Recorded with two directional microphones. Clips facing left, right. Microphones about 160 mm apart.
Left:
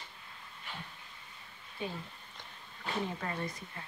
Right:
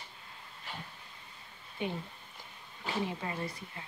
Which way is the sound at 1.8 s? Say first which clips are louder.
Right 3 dB; 20° right (ahead or behind).